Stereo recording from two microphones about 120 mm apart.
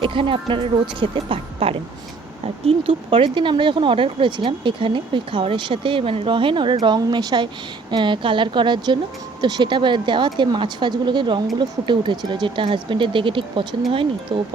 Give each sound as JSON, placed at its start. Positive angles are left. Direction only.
{"t": 0.0, "sound": "a woman's voice", "side_deg": -45}